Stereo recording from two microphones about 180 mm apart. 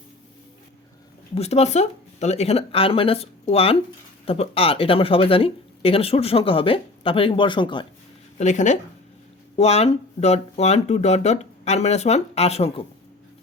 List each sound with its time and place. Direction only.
1.4 s speech: 35° left (ahead or behind)
8.4 s speech: 40° left (ahead or behind)